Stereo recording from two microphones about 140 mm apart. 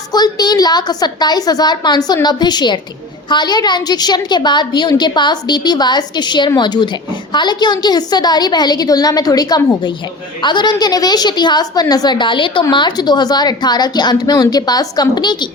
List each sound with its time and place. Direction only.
0.1 s a woman's voice: 30° left (ahead or behind)